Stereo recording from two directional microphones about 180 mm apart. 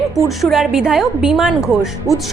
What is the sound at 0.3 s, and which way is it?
A woman's voice, centre (ahead or behind).